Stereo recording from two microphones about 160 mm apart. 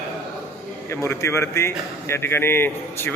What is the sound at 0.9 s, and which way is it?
Speech, 15° left (ahead or behind).